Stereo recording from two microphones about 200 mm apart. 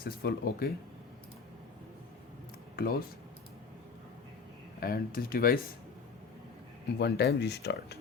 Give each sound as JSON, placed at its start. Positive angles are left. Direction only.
{"t": 0.0, "sound": "speech", "side_deg": 50}
{"t": 2.7, "sound": "speech", "side_deg": 50}
{"t": 4.8, "sound": "speech", "side_deg": 50}
{"t": 7.0, "sound": "speech", "side_deg": 55}